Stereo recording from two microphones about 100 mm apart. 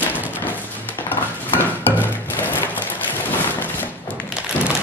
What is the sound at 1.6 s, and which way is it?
Music, 20° left (ahead or behind).